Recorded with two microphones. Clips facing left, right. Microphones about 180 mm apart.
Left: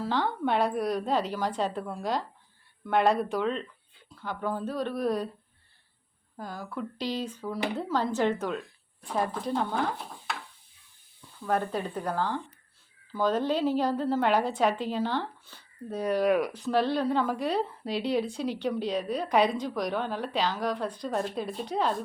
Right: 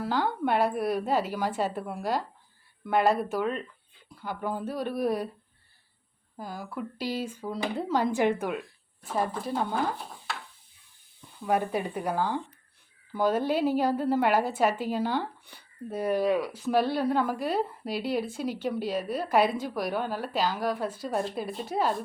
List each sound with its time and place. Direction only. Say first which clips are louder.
0.0 s a woman's voice: right 1 dB; 5° right (ahead or behind)
6.3 s a woman's voice: even; 10° right (ahead or behind)
11.4 s a woman's voice: right 2 dB; 10° right (ahead or behind)
16.4 s speech: left 3 dB; 20° left (ahead or behind)
16.6 s a woman's voice: right 2 dB; 10° right (ahead or behind)